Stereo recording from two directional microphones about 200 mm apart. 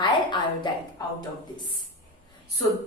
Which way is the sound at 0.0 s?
20° left (ahead or behind).